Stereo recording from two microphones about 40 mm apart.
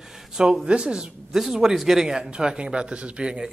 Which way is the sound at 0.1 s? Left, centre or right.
Centre.